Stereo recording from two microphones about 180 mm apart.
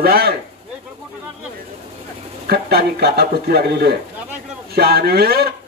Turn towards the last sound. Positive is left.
turn(degrees=-60)  # may be behind; listen again after turning